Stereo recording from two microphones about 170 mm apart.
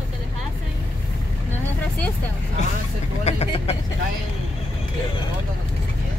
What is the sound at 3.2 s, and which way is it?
Speech, 40° left (ahead or behind).